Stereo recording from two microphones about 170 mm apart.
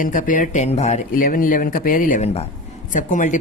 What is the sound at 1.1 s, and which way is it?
Speech, 55° left (ahead or behind).